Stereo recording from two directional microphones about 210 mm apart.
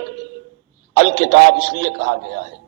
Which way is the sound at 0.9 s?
70° right (ahead or behind).